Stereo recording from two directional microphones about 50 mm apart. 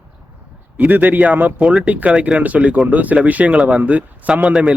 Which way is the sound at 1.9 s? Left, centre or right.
Right.